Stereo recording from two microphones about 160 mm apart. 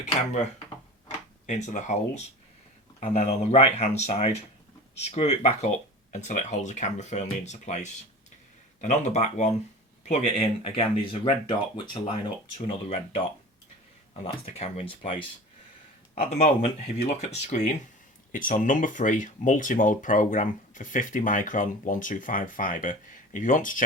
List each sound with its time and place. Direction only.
1.5 s speech: 45° left (ahead or behind)